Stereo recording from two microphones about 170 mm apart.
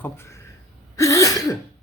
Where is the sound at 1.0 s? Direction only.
20° left (ahead or behind).